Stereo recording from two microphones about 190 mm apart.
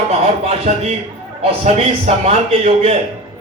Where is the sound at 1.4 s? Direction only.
30° right (ahead or behind).